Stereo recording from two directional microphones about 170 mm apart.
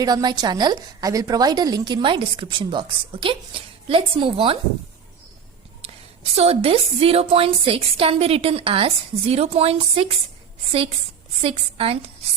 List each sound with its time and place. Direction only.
0.0 s a woman's voice: 25° right (ahead or behind)
6.3 s a woman's voice: 35° right (ahead or behind)
11.4 s a woman's voice: 35° right (ahead or behind)